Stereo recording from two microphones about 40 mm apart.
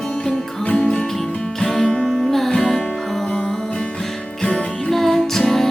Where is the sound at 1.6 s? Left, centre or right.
Centre.